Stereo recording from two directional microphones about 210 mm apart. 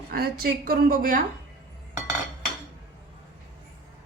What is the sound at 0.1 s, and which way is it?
A woman's voice, 45° right (ahead or behind).